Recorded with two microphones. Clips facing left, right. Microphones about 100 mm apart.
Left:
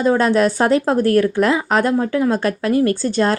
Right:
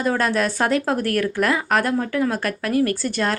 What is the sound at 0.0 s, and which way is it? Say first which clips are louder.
Speech: left 6 dB; 25° left (ahead or behind).